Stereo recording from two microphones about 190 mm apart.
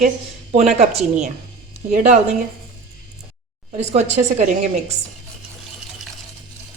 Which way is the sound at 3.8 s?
35° right (ahead or behind).